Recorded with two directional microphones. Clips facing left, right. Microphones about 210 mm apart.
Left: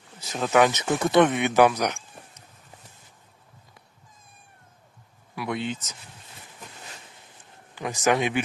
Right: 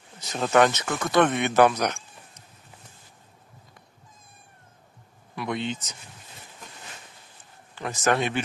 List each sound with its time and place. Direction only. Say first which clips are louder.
0.2 s speech: even; centre (ahead or behind)
0.8 s speech: left 3 dB; 25° left (ahead or behind)
1.2 s speech: right 1 dB; 10° left (ahead or behind)
5.3 s speech: even; 5° left (ahead or behind)
7.8 s speech: left 1 dB; 10° left (ahead or behind)